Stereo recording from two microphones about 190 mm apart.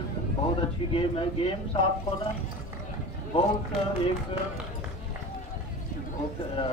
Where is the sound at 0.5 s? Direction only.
30° left (ahead or behind).